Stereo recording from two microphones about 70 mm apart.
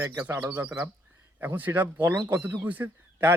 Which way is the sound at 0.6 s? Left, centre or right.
Right.